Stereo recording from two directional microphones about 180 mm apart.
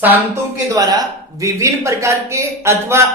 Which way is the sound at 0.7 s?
20° right (ahead or behind).